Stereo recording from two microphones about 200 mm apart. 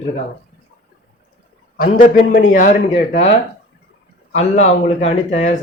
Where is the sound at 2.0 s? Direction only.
45° left (ahead or behind).